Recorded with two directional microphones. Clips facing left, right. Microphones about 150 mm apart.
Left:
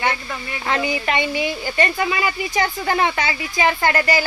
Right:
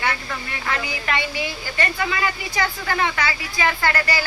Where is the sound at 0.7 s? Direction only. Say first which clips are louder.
Left 5 dB; 20° left (ahead or behind).